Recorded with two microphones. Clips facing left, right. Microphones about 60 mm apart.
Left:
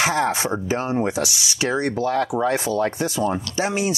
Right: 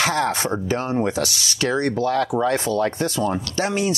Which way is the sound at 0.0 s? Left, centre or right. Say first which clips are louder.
Even; centre.